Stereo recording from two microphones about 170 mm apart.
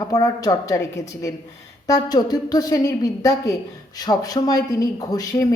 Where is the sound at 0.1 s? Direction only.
20° left (ahead or behind).